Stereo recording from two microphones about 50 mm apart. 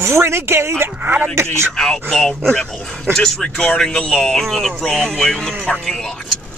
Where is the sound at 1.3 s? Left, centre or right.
Right.